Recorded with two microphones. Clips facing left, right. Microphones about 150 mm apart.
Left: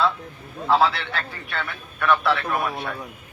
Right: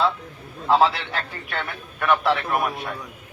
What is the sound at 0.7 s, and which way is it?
A man's voice, 15° right (ahead or behind).